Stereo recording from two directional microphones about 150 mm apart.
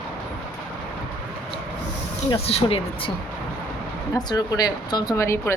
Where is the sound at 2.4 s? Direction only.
40° left (ahead or behind).